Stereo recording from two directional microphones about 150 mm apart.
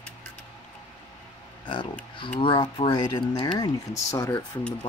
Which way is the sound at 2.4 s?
35° left (ahead or behind).